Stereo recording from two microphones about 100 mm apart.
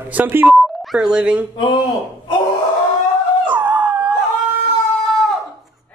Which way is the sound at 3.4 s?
15° right (ahead or behind).